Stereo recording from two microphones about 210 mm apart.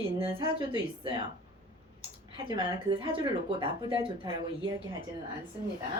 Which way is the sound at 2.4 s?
25° right (ahead or behind).